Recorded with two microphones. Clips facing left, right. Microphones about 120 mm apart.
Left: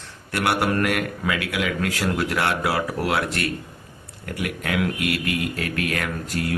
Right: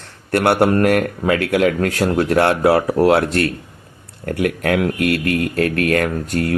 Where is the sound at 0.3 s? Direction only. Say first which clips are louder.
Right 8 dB; 50° right (ahead or behind).